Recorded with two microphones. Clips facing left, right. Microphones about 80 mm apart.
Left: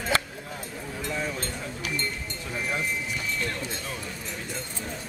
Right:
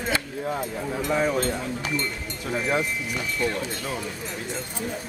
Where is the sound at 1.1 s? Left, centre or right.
Right.